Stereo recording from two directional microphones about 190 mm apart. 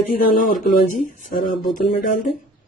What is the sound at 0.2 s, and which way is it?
Speech, 45° left (ahead or behind).